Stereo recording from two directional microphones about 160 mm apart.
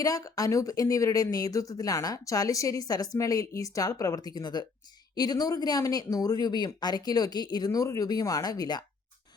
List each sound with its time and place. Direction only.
0.0 s speech: 20° left (ahead or behind)